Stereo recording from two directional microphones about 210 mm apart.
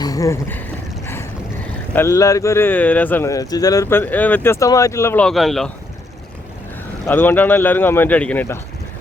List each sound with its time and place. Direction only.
0.0 s speech: 15° left (ahead or behind)
2.0 s speech: 15° left (ahead or behind)
7.0 s speech: 10° left (ahead or behind)